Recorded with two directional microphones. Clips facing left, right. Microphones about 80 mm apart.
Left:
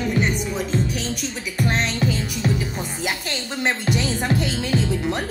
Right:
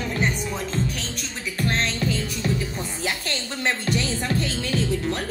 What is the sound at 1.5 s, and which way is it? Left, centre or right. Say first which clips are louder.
Music: left 2 dB; centre.